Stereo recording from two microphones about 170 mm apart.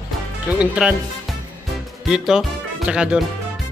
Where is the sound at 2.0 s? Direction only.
5° right (ahead or behind).